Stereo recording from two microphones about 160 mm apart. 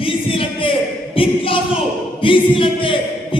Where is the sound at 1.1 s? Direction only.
35° left (ahead or behind).